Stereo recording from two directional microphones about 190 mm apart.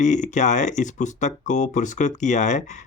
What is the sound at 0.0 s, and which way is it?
Speech, 40° left (ahead or behind).